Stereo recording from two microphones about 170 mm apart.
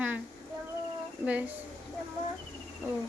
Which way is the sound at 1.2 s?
10° right (ahead or behind).